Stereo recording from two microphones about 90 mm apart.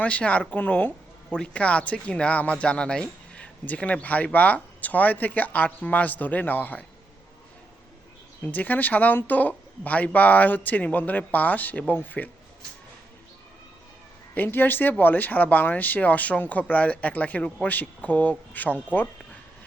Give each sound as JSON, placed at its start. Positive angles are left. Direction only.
{"t": 0.0, "sound": "speech", "side_deg": 15}
{"t": 8.4, "sound": "speech", "side_deg": 20}
{"t": 14.3, "sound": "speech", "side_deg": 20}